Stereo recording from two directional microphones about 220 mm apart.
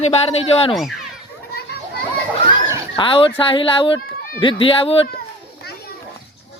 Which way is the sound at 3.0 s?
25° left (ahead or behind).